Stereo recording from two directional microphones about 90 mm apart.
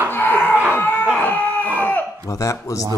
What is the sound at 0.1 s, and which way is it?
Chicken, 20° left (ahead or behind).